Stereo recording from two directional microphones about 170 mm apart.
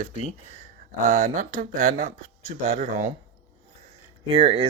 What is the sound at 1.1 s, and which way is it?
Speech, 50° right (ahead or behind).